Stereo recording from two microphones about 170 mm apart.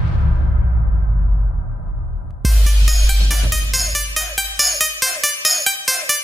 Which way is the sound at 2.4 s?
Centre (ahead or behind).